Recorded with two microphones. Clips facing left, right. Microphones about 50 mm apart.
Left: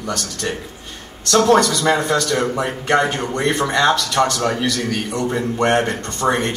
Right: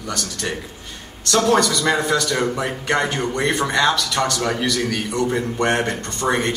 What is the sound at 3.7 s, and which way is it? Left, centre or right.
Speech, left.